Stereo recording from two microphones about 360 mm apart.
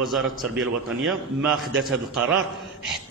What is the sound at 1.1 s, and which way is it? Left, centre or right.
A man's voice, centre.